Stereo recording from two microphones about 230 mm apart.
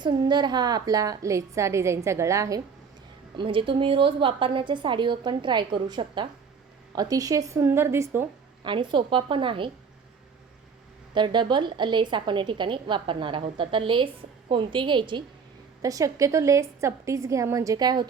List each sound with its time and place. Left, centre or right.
0.0 s a woman's voice: centre
11.1 s a woman's voice: centre